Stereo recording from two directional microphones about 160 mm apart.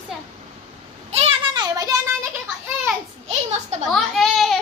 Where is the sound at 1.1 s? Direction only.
40° right (ahead or behind).